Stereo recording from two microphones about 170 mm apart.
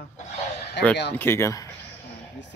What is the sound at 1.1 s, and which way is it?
Speech, 15° left (ahead or behind).